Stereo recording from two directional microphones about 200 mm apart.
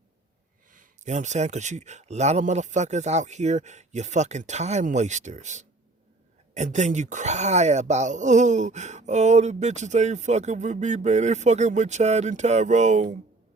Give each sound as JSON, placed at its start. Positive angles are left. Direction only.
{"t": 0.7, "sound": "speech", "side_deg": -40}